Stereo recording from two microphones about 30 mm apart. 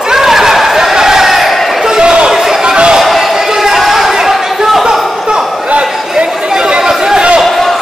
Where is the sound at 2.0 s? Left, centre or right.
Right.